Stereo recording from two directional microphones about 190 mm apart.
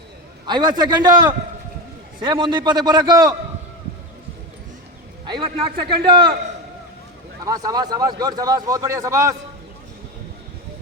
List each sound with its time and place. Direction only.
0.4 s a man's voice: 20° right (ahead or behind)
5.2 s a man's voice: 25° right (ahead or behind)
7.4 s a man's voice: 20° right (ahead or behind)